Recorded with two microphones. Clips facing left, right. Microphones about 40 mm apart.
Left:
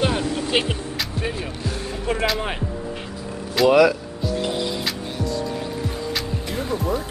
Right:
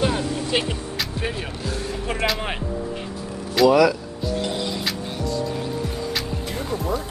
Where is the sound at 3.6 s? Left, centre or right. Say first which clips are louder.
Left 1 dB; left.